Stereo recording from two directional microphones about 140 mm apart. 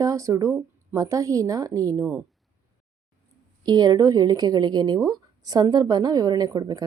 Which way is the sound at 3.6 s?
30° right (ahead or behind).